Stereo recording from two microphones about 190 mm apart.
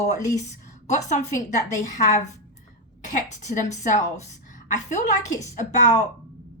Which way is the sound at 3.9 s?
40° left (ahead or behind).